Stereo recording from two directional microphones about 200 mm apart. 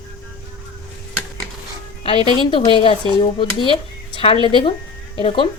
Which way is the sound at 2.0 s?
30° left (ahead or behind).